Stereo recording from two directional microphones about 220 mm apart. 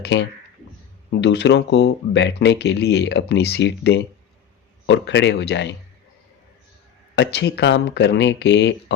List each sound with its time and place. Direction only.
0.0 s speech: 50° left (ahead or behind)
7.2 s speech: 50° left (ahead or behind)